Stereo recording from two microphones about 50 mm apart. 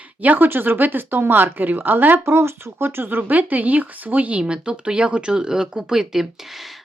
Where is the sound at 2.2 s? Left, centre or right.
Right.